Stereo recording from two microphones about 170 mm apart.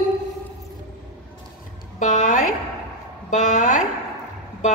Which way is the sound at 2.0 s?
50° left (ahead or behind).